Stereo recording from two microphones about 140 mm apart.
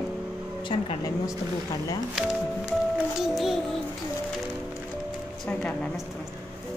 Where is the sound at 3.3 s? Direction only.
Centre (ahead or behind).